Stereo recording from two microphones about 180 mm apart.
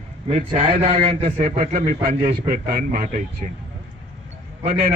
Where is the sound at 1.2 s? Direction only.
45° right (ahead or behind).